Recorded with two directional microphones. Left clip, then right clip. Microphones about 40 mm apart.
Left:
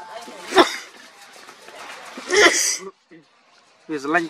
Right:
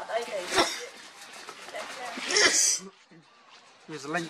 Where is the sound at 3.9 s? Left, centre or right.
Left.